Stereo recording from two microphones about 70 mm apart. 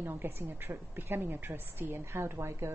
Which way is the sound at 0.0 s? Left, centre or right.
Right.